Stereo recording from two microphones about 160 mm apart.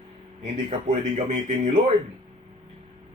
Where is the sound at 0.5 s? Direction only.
35° right (ahead or behind).